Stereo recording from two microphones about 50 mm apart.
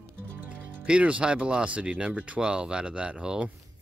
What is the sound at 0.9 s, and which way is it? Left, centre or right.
Speech, right.